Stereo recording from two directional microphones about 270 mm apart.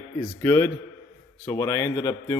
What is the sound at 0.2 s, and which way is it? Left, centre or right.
A man's voice, centre.